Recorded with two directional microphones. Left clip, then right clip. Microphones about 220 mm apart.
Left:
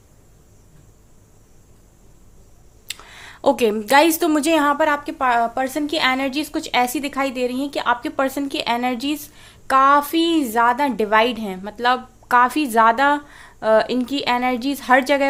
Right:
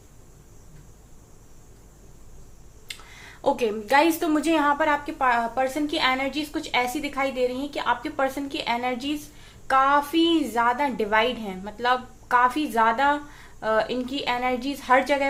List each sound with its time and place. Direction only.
2.8 s a woman's voice: 50° left (ahead or behind)